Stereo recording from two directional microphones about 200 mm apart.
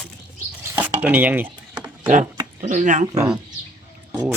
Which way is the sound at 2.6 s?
35° right (ahead or behind).